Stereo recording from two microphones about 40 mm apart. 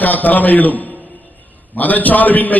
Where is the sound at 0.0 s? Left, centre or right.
Left.